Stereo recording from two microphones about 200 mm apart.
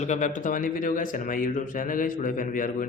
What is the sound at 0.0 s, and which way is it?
Speech, 35° left (ahead or behind).